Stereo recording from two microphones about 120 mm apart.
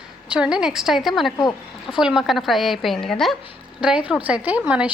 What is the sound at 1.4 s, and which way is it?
Speech, 35° left (ahead or behind).